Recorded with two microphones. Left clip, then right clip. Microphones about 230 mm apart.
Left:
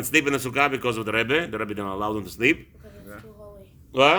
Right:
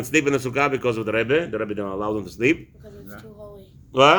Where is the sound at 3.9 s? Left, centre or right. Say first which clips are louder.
Right 3 dB; centre.